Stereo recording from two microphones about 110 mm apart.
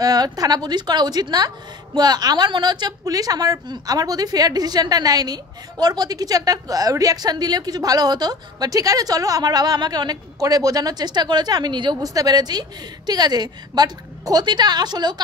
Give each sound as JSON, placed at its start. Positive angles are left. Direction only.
{"t": 0.0, "sound": "a woman's voice", "side_deg": -35}